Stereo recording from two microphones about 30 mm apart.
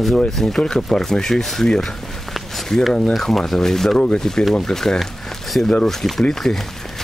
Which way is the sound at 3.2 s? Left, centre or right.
Centre.